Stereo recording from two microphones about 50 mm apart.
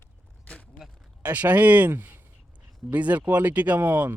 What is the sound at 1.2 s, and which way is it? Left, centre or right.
Speech, right.